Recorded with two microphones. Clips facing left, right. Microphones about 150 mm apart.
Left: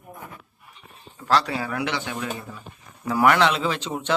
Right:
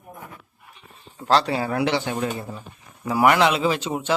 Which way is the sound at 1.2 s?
30° right (ahead or behind).